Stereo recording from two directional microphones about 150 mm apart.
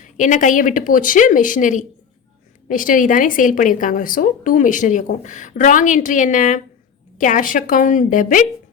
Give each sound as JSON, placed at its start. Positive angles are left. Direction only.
{"t": 0.0, "sound": "speech", "side_deg": 55}